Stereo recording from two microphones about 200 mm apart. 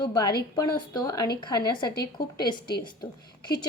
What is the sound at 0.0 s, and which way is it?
A woman's voice, 20° left (ahead or behind).